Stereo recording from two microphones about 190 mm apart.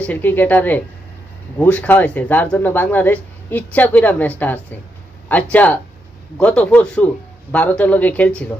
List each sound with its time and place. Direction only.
0.0 s speech: 10° left (ahead or behind)